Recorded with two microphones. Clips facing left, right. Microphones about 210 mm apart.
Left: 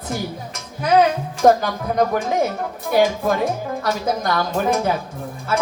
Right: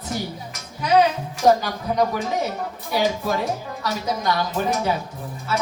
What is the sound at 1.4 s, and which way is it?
Speech, 55° left (ahead or behind).